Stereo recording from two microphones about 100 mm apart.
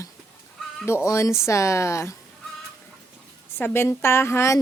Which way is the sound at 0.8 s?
25° left (ahead or behind).